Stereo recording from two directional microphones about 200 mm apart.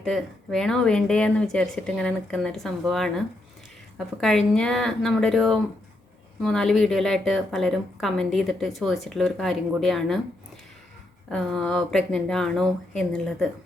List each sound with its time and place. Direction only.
0.0 s a woman's voice: centre (ahead or behind)
11.3 s a woman's voice: 5° left (ahead or behind)